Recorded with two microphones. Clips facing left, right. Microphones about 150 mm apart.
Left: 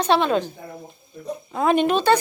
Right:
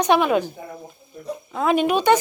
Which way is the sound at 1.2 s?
5° left (ahead or behind).